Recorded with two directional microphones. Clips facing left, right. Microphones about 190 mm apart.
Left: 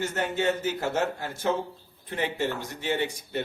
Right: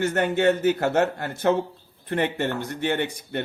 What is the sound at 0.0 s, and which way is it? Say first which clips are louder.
Speech: right 6 dB; 60° right (ahead or behind).